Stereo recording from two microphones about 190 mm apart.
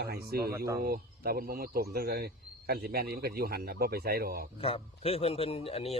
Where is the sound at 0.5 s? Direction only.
15° right (ahead or behind).